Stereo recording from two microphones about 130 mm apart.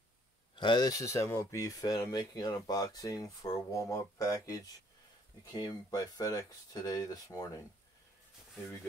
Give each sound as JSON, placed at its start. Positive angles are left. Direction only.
{"t": 0.6, "sound": "speech", "side_deg": 35}